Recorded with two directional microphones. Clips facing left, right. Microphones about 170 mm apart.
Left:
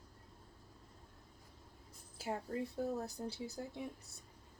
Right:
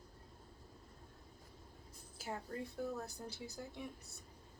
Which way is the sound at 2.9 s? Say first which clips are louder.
Left 4 dB; 35° left (ahead or behind).